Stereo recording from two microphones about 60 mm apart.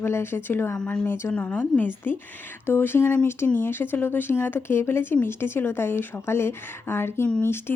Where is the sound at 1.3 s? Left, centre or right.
Left.